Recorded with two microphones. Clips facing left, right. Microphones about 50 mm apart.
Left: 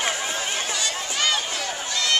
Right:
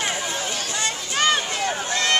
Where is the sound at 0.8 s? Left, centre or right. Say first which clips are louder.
Right 7 dB; right.